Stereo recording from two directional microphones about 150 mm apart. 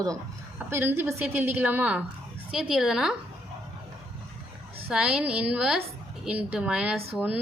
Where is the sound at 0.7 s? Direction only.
15° right (ahead or behind).